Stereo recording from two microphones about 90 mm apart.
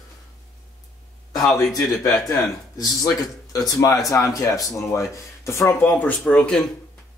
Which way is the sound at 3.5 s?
40° left (ahead or behind).